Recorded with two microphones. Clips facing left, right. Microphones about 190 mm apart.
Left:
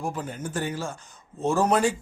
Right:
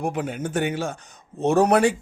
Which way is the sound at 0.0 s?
70° right (ahead or behind).